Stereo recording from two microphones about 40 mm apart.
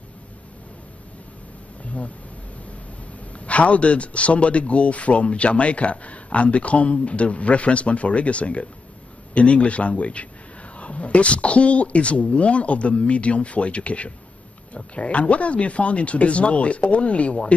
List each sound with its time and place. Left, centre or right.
3.3 s a man's voice: left